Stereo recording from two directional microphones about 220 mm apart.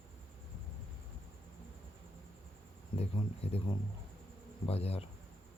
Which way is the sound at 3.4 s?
30° left (ahead or behind).